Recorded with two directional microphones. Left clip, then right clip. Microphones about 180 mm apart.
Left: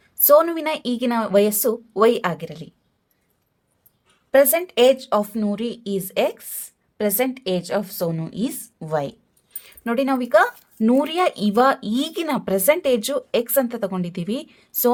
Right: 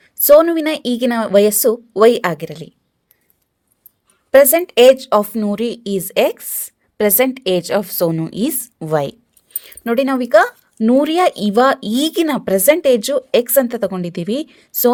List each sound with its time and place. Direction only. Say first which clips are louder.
0.0 s speech: right 6 dB; 30° right (ahead or behind)
4.3 s a woman's voice: right 6 dB; 40° right (ahead or behind)
9.5 s speech: right 6 dB; 35° right (ahead or behind)